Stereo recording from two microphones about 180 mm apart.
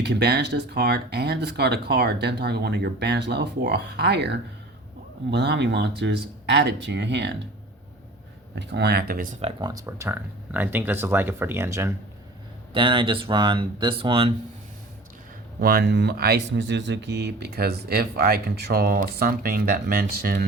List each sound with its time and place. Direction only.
0.0 s speech: 70° right (ahead or behind)
8.5 s speech: 70° right (ahead or behind); by 9.3 s 55° right (ahead or behind)
9.4 s speech: 25° right (ahead or behind)
12.7 s speech: 30° right (ahead or behind)
15.6 s speech: 60° right (ahead or behind)